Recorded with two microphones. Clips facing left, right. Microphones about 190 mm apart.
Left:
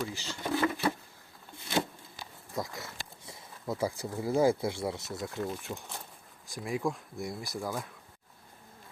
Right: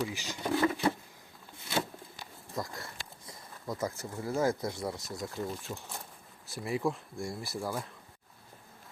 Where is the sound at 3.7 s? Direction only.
10° left (ahead or behind).